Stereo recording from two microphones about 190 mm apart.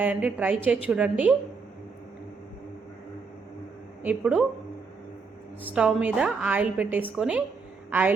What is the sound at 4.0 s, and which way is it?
Speech, 5° right (ahead or behind).